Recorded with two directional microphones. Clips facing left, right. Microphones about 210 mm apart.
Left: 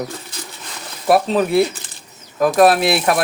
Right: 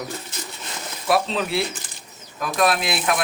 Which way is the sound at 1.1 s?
50° left (ahead or behind).